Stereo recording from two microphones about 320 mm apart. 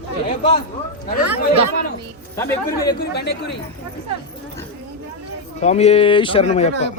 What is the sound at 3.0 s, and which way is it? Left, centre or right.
Speech, left.